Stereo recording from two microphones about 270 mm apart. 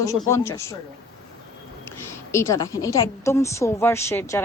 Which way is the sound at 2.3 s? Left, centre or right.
Centre.